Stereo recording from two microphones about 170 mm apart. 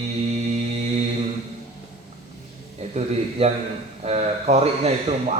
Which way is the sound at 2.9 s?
40° right (ahead or behind).